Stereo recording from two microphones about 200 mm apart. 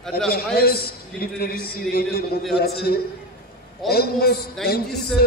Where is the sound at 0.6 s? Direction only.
50° left (ahead or behind).